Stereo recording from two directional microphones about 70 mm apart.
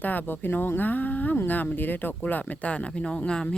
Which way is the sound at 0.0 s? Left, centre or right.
Left.